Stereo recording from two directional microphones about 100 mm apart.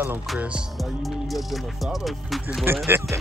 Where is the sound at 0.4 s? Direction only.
10° right (ahead or behind).